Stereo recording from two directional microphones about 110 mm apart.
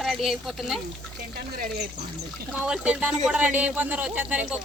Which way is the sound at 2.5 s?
10° right (ahead or behind).